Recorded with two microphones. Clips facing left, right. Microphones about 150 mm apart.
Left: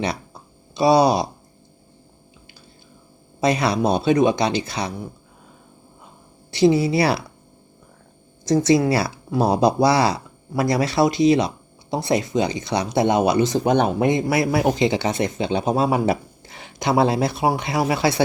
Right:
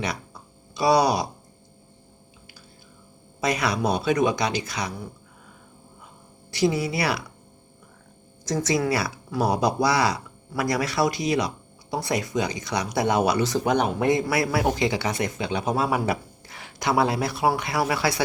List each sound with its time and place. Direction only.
0.0 s a sound: 25° left (ahead or behind)
3.4 s speech: 30° left (ahead or behind)
6.5 s speech: 25° left (ahead or behind)
8.4 s speech: 30° left (ahead or behind)